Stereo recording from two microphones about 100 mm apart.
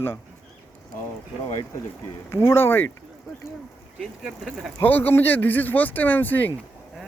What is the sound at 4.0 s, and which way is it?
Speech, centre (ahead or behind).